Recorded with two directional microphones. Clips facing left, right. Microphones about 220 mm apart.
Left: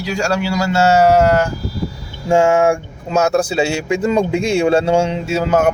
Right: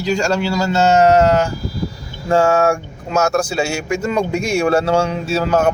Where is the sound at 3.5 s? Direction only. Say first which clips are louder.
Left 3 dB; 20° left (ahead or behind).